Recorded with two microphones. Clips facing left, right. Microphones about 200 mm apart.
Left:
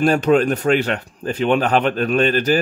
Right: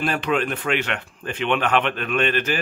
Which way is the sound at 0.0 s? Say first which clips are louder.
Left 8 dB; 40° left (ahead or behind).